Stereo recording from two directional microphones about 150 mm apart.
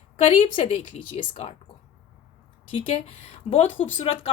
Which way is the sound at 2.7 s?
40° left (ahead or behind).